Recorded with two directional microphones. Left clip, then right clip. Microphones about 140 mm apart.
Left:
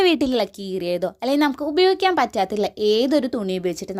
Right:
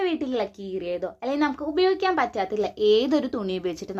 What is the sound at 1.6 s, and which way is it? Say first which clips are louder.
Speech: left 4 dB; 90° left.